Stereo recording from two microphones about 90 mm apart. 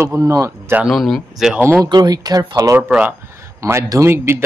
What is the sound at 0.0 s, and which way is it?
Speech, 35° right (ahead or behind).